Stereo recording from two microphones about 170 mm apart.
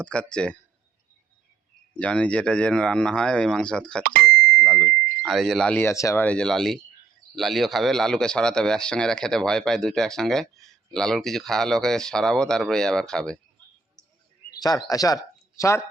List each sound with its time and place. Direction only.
0.0 s speech: 5° left (ahead or behind)
2.0 s speech: 5° left (ahead or behind)
4.0 s speech: 60° right (ahead or behind)
4.3 s speech: 5° left (ahead or behind)
6.2 s speech: 5° left (ahead or behind)
14.6 s speech: 20° left (ahead or behind)